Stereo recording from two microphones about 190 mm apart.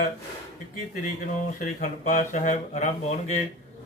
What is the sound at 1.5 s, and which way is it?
Speech, 40° left (ahead or behind).